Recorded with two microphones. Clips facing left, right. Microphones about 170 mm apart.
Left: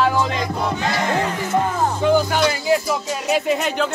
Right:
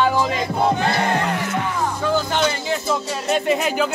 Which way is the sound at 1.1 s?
65° right (ahead or behind).